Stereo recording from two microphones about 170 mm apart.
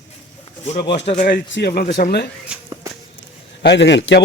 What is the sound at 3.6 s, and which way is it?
Speech, 90° left.